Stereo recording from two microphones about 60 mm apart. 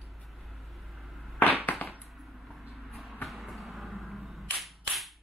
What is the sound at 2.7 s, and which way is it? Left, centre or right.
Vehicle, centre.